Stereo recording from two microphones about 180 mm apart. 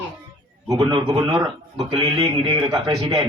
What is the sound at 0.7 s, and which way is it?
Speech, 20° right (ahead or behind).